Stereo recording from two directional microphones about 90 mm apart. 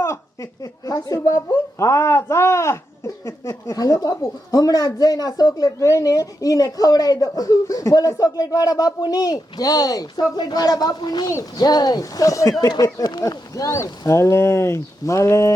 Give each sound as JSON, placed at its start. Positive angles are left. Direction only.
{"t": 1.0, "sound": "a woman's voice", "side_deg": 40}